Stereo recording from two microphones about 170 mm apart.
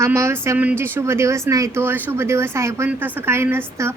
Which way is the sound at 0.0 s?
15° right (ahead or behind).